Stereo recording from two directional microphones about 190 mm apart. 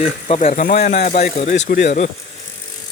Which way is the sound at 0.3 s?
35° left (ahead or behind).